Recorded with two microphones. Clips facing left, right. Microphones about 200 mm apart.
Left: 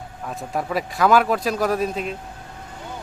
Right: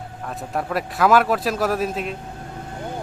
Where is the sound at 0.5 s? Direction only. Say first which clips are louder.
Even; centre (ahead or behind).